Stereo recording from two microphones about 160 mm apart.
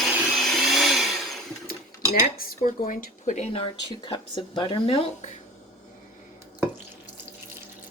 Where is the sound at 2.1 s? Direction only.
65° left (ahead or behind); by 5.3 s 40° left (ahead or behind).